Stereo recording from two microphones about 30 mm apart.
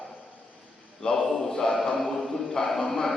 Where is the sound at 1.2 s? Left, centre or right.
Centre.